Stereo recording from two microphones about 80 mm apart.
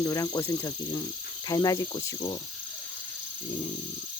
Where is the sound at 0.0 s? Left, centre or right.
Left.